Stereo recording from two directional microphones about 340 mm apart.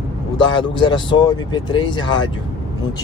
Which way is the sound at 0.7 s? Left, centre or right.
Centre.